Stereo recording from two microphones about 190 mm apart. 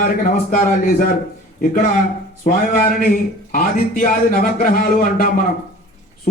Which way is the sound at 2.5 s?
50° left (ahead or behind).